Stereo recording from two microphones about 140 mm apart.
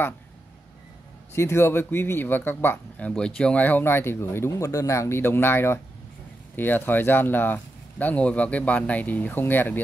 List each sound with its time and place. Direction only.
1.3 s speech: 20° left (ahead or behind)